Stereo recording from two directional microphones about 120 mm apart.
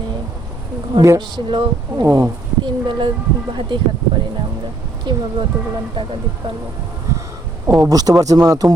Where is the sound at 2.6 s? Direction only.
40° right (ahead or behind).